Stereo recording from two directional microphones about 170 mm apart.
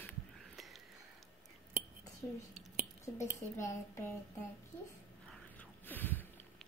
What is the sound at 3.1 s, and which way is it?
Speech, 10° left (ahead or behind).